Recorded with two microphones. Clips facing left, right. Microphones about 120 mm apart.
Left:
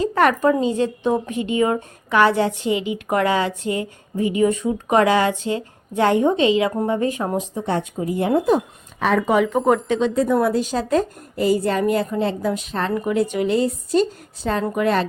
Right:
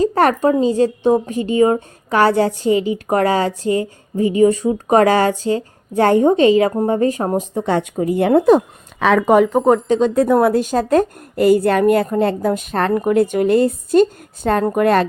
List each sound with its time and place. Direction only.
0.0 s a woman's voice: 35° right (ahead or behind)
7.6 s speech: 85° right
9.2 s a woman's voice: 45° right (ahead or behind)
10.2 s a woman's voice: 60° right (ahead or behind)